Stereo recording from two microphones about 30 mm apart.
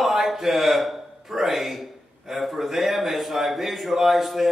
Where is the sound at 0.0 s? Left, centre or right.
Centre.